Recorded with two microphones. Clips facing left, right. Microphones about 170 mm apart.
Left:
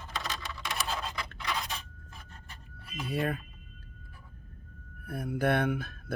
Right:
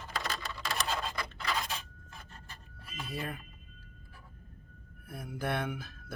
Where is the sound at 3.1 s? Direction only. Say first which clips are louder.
Left 8 dB; 65° left (ahead or behind).